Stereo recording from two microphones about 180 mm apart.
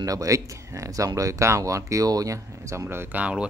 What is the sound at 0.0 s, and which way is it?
Speech, 20° right (ahead or behind).